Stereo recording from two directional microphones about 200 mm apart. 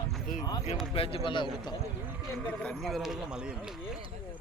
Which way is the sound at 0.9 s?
30° left (ahead or behind).